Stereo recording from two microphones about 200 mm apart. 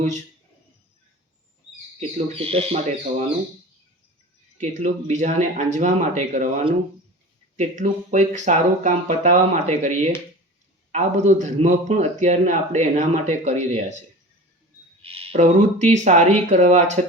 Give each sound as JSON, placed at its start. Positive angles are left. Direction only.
{"t": 2.0, "sound": "a man's voice", "side_deg": -30}
{"t": 4.6, "sound": "a man's voice", "side_deg": -35}
{"t": 15.0, "sound": "a man's voice", "side_deg": -30}